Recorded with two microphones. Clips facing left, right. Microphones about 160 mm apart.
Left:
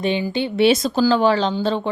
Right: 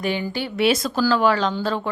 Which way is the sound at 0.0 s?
20° left (ahead or behind).